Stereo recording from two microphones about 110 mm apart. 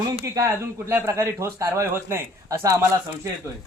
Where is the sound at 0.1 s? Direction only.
35° right (ahead or behind).